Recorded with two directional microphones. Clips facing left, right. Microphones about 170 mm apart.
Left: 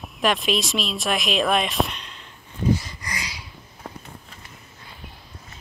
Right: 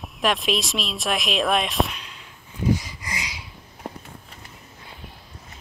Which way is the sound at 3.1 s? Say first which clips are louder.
Even; 20° right (ahead or behind).